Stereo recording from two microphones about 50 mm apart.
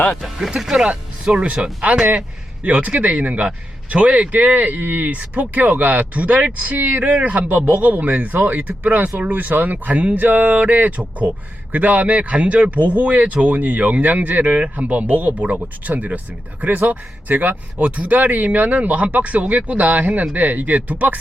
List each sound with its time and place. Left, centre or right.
0.2 s speech: centre
0.7 s a man's voice: centre